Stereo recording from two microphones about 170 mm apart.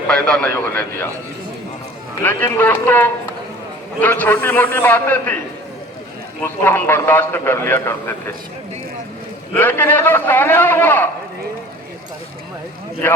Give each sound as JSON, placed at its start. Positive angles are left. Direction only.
{"t": 0.1, "sound": "a man's voice", "side_deg": 5}
{"t": 2.2, "sound": "a man's voice", "side_deg": 10}
{"t": 6.4, "sound": "a man's voice", "side_deg": 15}
{"t": 9.6, "sound": "a man's voice", "side_deg": 10}